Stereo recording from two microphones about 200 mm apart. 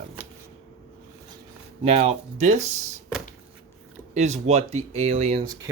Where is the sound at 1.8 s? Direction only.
30° right (ahead or behind).